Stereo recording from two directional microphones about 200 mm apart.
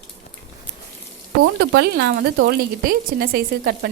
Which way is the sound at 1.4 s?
65° right (ahead or behind).